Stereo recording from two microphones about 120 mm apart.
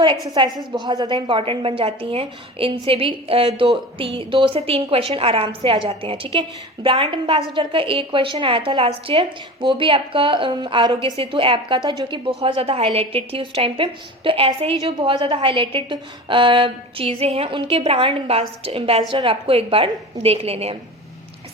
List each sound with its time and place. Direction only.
0.3 s a woman's voice: 35° right (ahead or behind); by 20.7 s 60° right (ahead or behind)